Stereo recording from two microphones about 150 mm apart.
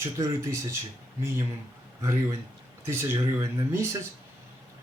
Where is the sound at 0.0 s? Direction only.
20° right (ahead or behind).